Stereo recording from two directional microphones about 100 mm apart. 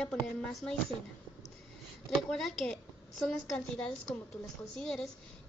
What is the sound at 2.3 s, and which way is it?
A woman's voice, 5° left (ahead or behind).